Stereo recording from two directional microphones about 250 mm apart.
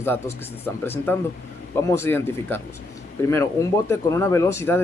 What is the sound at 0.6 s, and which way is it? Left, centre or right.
Speech, centre.